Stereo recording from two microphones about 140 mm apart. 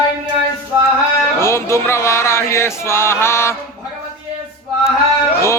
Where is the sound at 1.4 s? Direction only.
20° left (ahead or behind).